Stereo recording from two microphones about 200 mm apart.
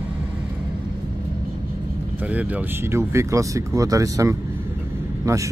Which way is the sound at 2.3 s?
5° right (ahead or behind).